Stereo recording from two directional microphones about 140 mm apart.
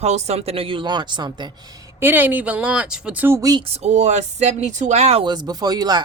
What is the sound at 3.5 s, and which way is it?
Speech, 45° right (ahead or behind).